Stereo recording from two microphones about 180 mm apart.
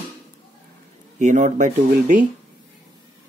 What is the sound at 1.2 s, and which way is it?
Speech, 40° right (ahead or behind).